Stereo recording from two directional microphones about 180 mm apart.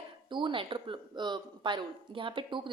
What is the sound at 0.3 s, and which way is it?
Speech, 25° right (ahead or behind).